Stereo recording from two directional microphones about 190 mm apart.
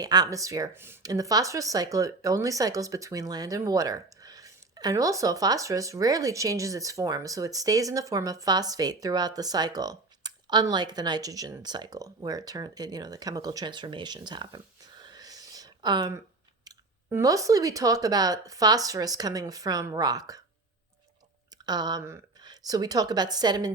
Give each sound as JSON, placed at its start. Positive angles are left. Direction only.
{"t": 0.0, "sound": "speech", "side_deg": -20}
{"t": 21.7, "sound": "speech", "side_deg": -20}